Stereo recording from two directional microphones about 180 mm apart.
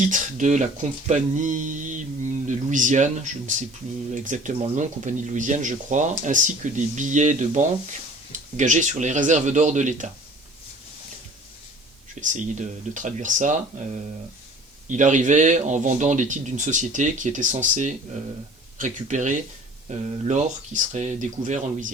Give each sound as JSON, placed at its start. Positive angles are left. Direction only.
{"t": 0.0, "sound": "speech", "side_deg": -45}
{"t": 12.2, "sound": "speech", "side_deg": -45}